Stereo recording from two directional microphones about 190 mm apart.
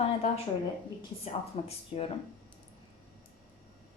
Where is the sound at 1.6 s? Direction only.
30° left (ahead or behind).